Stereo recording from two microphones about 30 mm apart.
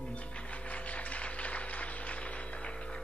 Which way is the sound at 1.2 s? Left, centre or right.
Left.